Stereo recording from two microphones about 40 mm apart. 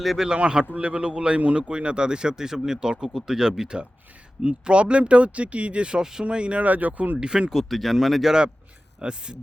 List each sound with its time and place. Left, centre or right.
0.3 s speech: right
6.7 s speech: right
7.2 s speech: right
7.5 s speech: centre
9.0 s speech: right